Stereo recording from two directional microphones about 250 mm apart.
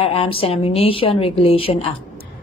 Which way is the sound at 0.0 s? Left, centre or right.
Left.